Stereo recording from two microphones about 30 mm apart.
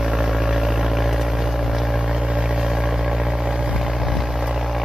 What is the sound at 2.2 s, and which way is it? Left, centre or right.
Vehicle, right.